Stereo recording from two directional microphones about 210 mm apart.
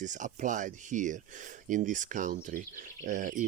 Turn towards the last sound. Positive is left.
turn(degrees=-40)  # may be behind; listen again after turning